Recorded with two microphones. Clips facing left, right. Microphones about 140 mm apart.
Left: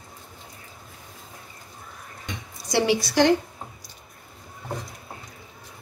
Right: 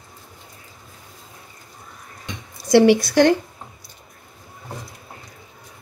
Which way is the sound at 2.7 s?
60° right (ahead or behind).